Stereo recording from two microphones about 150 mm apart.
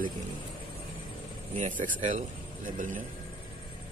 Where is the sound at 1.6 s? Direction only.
60° right (ahead or behind).